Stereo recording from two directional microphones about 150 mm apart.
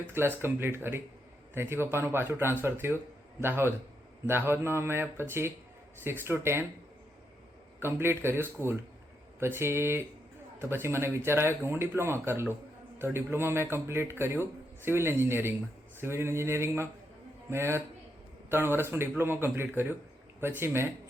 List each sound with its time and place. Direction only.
0.1 s speech: 15° right (ahead or behind)
7.8 s speech: 15° right (ahead or behind)